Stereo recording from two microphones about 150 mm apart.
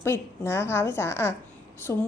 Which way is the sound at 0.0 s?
15° left (ahead or behind).